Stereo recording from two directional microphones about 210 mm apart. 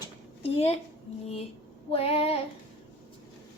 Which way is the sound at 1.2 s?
30° left (ahead or behind).